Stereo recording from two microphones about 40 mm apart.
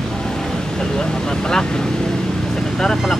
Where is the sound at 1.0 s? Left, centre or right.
Centre.